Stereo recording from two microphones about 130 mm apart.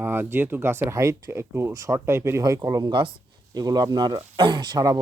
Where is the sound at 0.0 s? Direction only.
15° right (ahead or behind).